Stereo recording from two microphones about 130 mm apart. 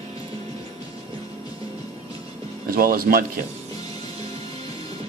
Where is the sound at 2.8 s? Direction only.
90° right.